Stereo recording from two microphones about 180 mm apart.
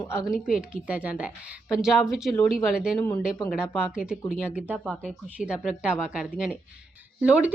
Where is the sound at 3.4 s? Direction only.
5° right (ahead or behind).